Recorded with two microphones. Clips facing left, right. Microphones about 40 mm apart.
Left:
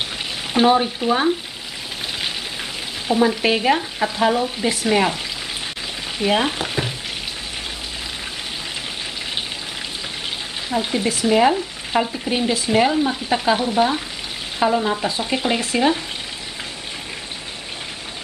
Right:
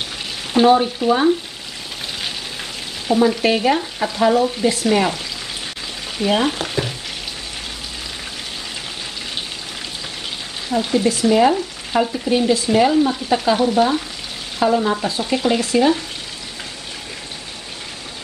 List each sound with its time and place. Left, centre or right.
0.5 s frying: centre
3.1 s frying: centre
10.7 s frying: centre
14.6 s speech: centre
15.0 s frying: centre